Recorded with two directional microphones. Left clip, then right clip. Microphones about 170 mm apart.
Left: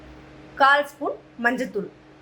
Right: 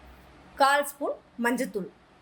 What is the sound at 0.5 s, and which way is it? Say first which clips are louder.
A woman's voice: left 5 dB; 50° right (ahead or behind).